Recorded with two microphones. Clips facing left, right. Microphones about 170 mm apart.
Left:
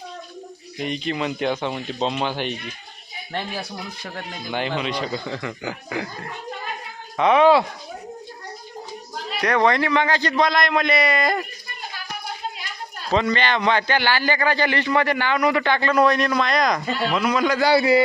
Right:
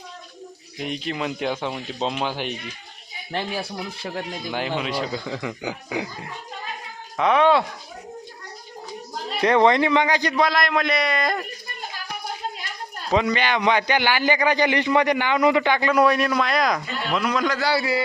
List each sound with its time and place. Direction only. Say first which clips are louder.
0.8 s a man's voice: left 2 dB; 5° right (ahead or behind)
3.3 s speech: right 2 dB; 30° right (ahead or behind)
4.4 s a man's voice: left 3 dB; 5° right (ahead or behind)
7.2 s a man's voice: left 3 dB; centre (ahead or behind)
9.4 s a man's voice: right 2 dB; 25° right (ahead or behind); by 11.4 s centre (ahead or behind)
13.1 s a man's voice: even; 10° right (ahead or behind); by 17.6 s 5° left (ahead or behind)
17.6 s a man's voice: left 6 dB; 20° left (ahead or behind)